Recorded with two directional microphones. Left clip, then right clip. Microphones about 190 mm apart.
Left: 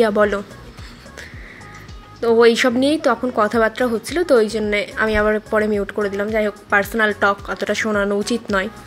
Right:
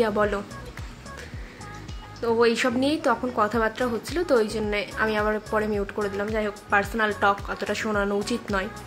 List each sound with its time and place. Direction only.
0.0 s speech: 30° left (ahead or behind)
2.2 s speech: 30° left (ahead or behind)